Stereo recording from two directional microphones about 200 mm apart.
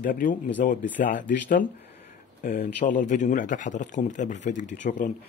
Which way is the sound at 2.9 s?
40° left (ahead or behind).